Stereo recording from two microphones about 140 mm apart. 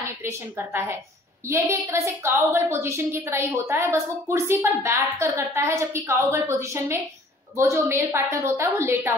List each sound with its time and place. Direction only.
0.2 s a woman's voice: 15° right (ahead or behind)